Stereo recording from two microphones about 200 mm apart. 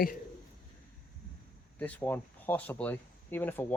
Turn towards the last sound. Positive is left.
turn(degrees=10)  # may be behind; listen again after turning